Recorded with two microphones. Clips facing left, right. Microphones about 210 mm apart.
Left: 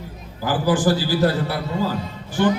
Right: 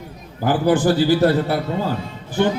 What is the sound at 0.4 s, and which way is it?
A man's voice, 60° right (ahead or behind).